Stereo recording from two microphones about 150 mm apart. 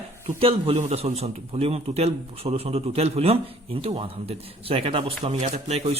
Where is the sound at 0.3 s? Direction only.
40° right (ahead or behind).